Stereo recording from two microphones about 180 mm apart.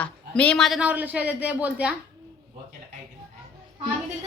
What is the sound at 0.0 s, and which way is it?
A man's voice, 5° left (ahead or behind).